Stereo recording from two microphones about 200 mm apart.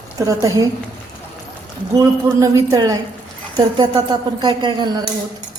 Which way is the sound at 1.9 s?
15° right (ahead or behind).